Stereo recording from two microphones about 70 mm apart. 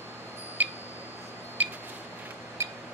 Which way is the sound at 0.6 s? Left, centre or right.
Right.